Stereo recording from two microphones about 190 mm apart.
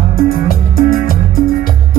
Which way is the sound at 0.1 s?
50° left (ahead or behind).